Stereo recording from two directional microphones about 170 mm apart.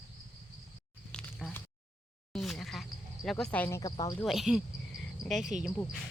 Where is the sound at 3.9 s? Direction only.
20° left (ahead or behind).